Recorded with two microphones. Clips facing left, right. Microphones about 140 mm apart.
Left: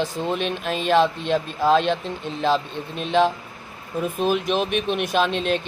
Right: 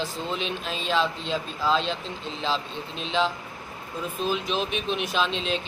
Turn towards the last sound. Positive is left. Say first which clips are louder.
# left 5 dB
turn(degrees=55)  # may be behind; listen again after turning